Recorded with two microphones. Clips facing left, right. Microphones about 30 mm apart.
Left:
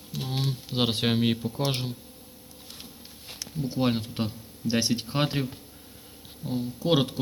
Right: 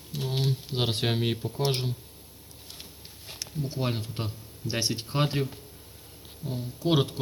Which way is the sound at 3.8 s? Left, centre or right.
Centre.